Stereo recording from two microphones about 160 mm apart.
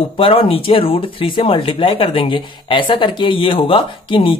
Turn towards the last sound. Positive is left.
turn(degrees=35)  # may be behind; listen again after turning